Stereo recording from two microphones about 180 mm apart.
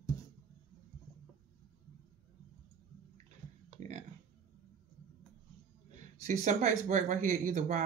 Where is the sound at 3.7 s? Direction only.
40° right (ahead or behind).